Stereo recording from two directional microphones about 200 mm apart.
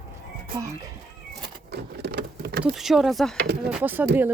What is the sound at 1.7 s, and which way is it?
Vehicle, 55° right (ahead or behind).